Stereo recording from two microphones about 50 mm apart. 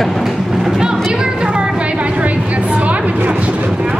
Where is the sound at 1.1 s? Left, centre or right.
Centre.